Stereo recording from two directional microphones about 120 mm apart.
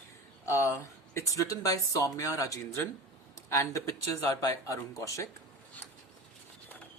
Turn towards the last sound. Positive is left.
turn(degrees=25)  # may be behind; listen again after turning